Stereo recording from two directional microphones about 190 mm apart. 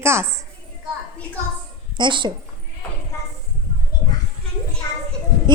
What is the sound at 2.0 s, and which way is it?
Speech, 25° right (ahead or behind).